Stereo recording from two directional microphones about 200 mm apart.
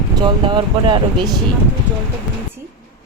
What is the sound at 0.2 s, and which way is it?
Speech, 20° right (ahead or behind).